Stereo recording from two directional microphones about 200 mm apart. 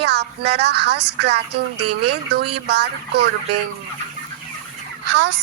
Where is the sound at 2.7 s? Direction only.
55° right (ahead or behind).